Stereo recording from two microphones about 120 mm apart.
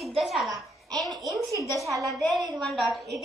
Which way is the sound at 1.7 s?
Centre (ahead or behind).